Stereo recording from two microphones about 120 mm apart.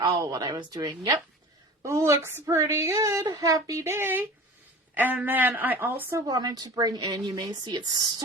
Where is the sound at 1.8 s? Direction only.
25° right (ahead or behind).